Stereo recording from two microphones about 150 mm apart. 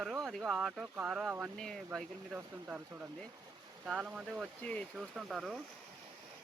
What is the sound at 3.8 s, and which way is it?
Speech, 5° right (ahead or behind).